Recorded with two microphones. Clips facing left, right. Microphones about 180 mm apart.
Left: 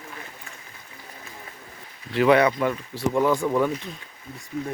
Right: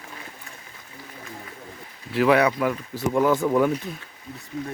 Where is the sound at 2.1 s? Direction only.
Centre (ahead or behind).